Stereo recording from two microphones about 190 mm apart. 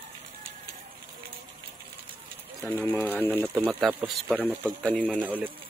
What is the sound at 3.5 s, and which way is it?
Speech, 10° right (ahead or behind).